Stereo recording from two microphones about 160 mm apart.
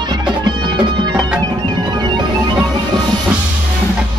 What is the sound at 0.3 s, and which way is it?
Music, 30° right (ahead or behind).